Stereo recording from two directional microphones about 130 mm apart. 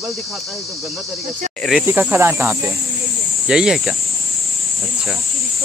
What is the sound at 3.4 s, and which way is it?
Speech, 5° right (ahead or behind).